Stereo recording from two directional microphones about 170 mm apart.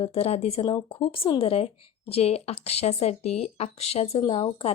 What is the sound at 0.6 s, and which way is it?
Speech, 25° left (ahead or behind).